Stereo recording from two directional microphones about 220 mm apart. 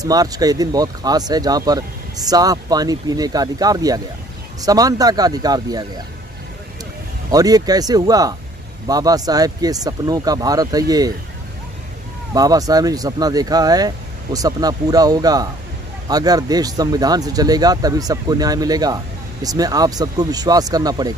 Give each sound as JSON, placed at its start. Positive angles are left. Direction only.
{"t": 0.0, "sound": "speech", "side_deg": -15}
{"t": 7.2, "sound": "speech", "side_deg": -15}
{"t": 12.4, "sound": "speech", "side_deg": -15}